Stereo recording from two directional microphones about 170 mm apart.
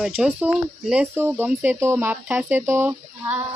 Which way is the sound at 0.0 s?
5° right (ahead or behind).